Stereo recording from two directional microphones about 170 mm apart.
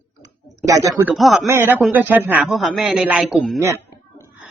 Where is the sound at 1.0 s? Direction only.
Centre (ahead or behind).